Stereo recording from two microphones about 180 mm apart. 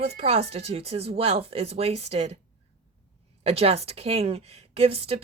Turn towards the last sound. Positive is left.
turn(degrees=-35)  # may be behind; listen again after turning